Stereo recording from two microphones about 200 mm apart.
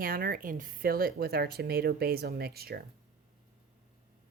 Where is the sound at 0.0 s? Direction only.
45° right (ahead or behind).